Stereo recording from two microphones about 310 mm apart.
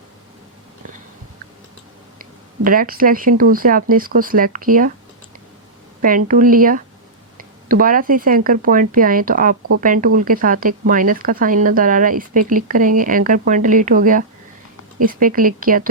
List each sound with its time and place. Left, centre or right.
2.6 s speech: right
6.0 s speech: right